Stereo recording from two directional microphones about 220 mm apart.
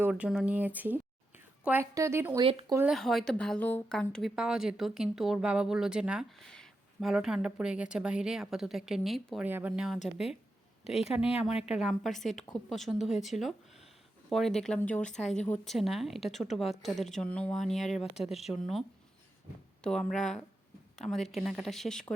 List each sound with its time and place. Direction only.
0.0 s speech: 5° right (ahead or behind)
2.4 s speech: 25° right (ahead or behind)
2.7 s a woman's voice: 5° right (ahead or behind)